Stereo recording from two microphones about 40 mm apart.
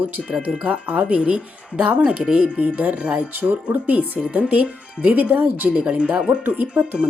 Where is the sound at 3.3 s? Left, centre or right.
Right.